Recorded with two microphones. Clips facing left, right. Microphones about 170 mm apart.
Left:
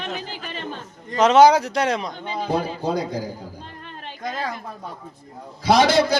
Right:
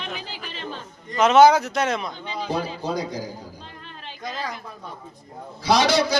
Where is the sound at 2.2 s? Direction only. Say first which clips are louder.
Left 3 dB; 50° left (ahead or behind).